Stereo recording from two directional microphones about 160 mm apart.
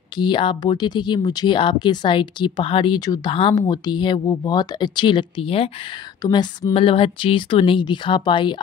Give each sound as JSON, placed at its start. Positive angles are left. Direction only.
{"t": 0.2, "sound": "speech", "side_deg": 30}
{"t": 6.2, "sound": "speech", "side_deg": 25}